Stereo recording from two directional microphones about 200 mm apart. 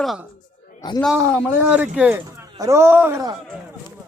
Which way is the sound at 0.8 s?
20° left (ahead or behind).